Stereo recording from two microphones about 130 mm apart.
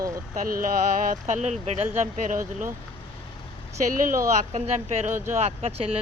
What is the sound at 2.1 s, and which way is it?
Speech, 80° right.